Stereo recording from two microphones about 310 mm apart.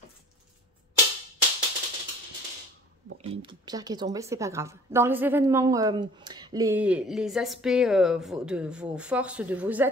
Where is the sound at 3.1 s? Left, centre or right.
Centre.